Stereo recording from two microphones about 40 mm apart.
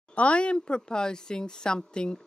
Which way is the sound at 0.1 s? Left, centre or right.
Left.